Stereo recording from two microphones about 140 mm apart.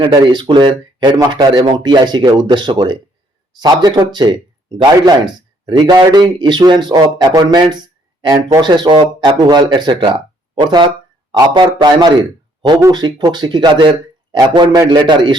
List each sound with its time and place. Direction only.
0.0 s a man's voice: 35° right (ahead or behind)